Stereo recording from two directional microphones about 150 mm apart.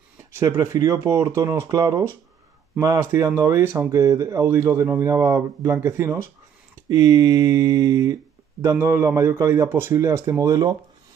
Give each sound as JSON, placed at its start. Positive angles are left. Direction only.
{"t": 0.5, "sound": "speech", "side_deg": -20}